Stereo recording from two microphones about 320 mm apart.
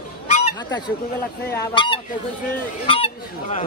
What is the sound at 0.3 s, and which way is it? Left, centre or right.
Goose, centre.